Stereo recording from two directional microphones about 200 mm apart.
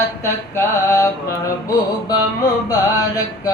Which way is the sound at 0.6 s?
15° left (ahead or behind).